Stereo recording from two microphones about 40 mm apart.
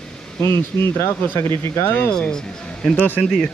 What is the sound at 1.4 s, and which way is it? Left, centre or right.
Speech, left.